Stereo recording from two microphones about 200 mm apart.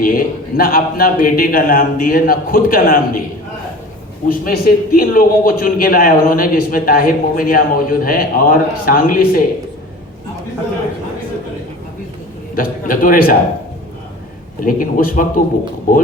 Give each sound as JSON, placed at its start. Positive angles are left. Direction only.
{"t": 0.0, "sound": "a man's voice", "side_deg": 45}
{"t": 4.3, "sound": "a man's voice", "side_deg": 45}
{"t": 12.5, "sound": "a man's voice", "side_deg": 45}
{"t": 14.6, "sound": "a man's voice", "side_deg": 45}